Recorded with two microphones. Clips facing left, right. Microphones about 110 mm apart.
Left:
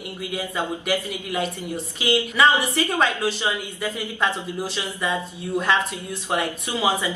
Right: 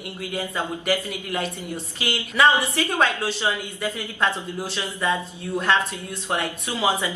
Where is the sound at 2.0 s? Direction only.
5° left (ahead or behind).